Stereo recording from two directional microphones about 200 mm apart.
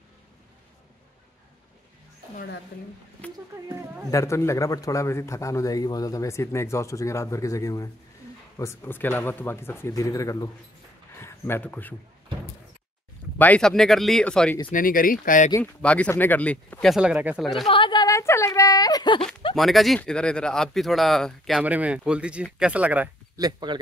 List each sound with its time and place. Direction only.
2.3 s speech: 55° left (ahead or behind)
3.2 s a man's voice: 5° left (ahead or behind)
3.5 s speech: 15° right (ahead or behind)
4.1 s a man's voice: 15° left (ahead or behind)
13.4 s speech: 5° left (ahead or behind)
14.7 s speech: 45° left (ahead or behind)
15.5 s a man's voice: 10° left (ahead or behind)
17.6 s speech: 25° left (ahead or behind)
19.5 s speech: centre (ahead or behind)
23.3 s speech: 20° right (ahead or behind)